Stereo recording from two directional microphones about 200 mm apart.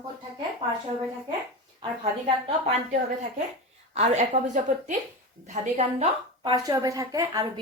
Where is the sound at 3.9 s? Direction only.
35° right (ahead or behind).